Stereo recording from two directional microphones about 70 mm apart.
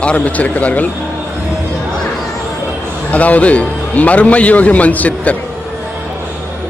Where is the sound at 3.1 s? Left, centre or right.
Left.